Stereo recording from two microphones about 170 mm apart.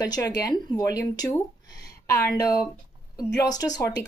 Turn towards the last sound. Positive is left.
turn(degrees=20)  # may be behind; listen again after turning